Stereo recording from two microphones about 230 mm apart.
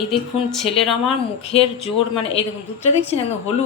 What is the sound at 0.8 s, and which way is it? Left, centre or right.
Speech, centre.